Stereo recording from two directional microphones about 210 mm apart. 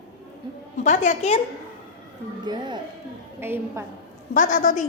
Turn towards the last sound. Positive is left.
turn(degrees=35)  # may be behind; listen again after turning